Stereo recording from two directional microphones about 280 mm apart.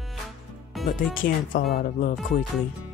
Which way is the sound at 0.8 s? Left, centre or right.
Centre.